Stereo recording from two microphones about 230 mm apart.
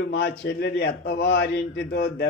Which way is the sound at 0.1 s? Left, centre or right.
Left.